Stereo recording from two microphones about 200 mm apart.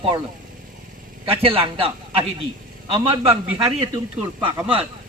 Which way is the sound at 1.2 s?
25° right (ahead or behind).